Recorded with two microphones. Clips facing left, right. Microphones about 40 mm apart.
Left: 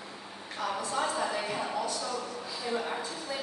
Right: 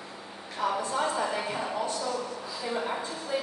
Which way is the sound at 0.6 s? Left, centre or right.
Right.